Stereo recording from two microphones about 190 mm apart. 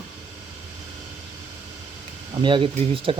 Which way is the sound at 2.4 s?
25° right (ahead or behind).